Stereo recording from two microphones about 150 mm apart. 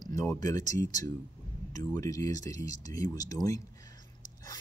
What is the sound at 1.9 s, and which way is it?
Speech, 20° left (ahead or behind).